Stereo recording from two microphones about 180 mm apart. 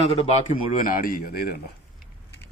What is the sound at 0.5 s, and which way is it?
Speech, 50° left (ahead or behind).